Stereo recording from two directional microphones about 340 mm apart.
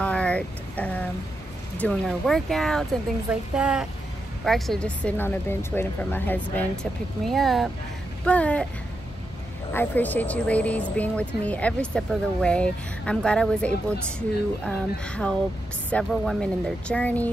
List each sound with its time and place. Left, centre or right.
0.0 s vehicle: centre
1.8 s speech: centre
9.7 s speech: centre